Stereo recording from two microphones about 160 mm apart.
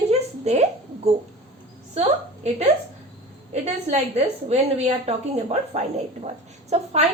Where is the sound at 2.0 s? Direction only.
45° right (ahead or behind).